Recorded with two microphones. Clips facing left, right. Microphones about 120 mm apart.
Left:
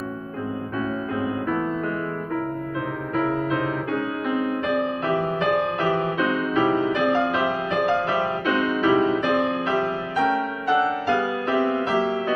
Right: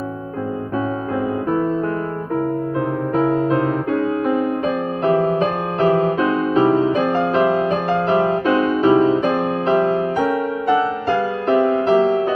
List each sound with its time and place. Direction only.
3.2 s music: 30° right (ahead or behind)
11.5 s music: 30° right (ahead or behind)